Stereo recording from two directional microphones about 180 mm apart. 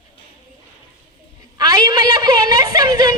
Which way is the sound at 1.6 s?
20° right (ahead or behind).